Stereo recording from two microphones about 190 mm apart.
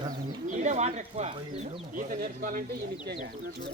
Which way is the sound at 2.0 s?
45° right (ahead or behind).